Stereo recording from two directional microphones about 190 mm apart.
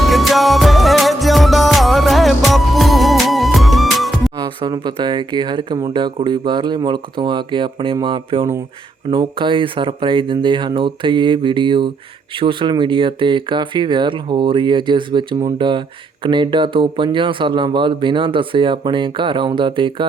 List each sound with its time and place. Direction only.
0.0 s music: centre (ahead or behind)
4.4 s speech: 20° right (ahead or behind)